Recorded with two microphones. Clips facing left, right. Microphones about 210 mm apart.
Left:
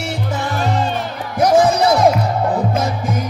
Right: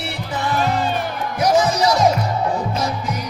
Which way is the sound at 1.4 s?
55° left (ahead or behind).